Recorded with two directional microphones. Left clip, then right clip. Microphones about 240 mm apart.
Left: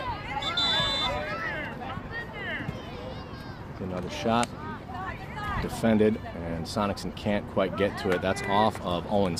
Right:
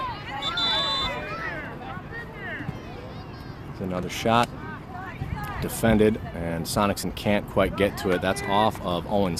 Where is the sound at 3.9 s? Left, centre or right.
Right.